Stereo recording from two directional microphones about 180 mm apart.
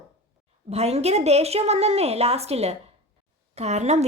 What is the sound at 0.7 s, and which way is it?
A woman's voice, 35° right (ahead or behind).